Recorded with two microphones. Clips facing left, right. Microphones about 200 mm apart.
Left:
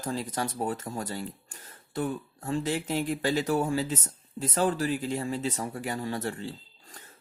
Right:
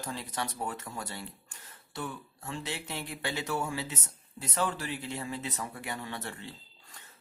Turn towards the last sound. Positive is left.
turn(degrees=35)  # may be behind; listen again after turning